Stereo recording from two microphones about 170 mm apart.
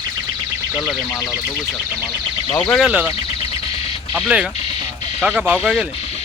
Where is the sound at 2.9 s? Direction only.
10° right (ahead or behind).